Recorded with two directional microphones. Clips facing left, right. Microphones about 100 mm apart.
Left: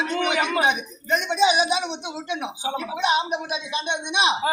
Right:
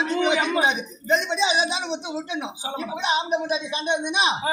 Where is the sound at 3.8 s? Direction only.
40° right (ahead or behind).